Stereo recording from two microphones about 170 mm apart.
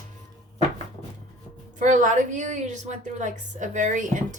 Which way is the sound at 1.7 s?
50° right (ahead or behind).